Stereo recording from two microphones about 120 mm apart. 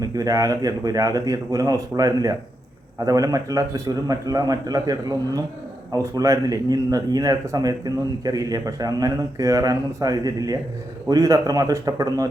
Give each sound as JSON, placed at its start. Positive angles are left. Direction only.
{"t": 0.0, "sound": "speech", "side_deg": -30}